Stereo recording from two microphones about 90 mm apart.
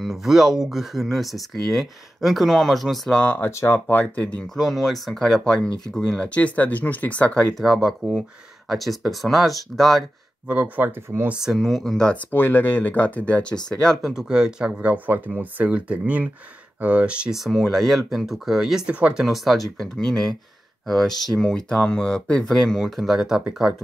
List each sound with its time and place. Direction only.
0.0 s speech: centre (ahead or behind)
3.2 s speech: 25° left (ahead or behind)
3.9 s speech: 15° left (ahead or behind)
4.6 s speech: centre (ahead or behind); by 7.4 s 15° left (ahead or behind)
7.5 s speech: centre (ahead or behind)
10.4 s speech: 15° right (ahead or behind)
11.2 s speech: 5° right (ahead or behind); by 12.3 s 10° left (ahead or behind)
12.3 s speech: 25° left (ahead or behind)
13.8 s speech: 5° right (ahead or behind)
19.2 s speech: centre (ahead or behind)